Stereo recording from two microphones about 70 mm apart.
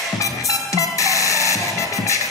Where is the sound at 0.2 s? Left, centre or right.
Left.